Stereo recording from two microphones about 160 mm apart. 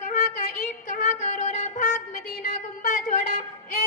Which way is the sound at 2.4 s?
55° left (ahead or behind).